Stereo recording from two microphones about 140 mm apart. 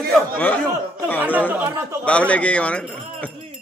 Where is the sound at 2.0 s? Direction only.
10° left (ahead or behind).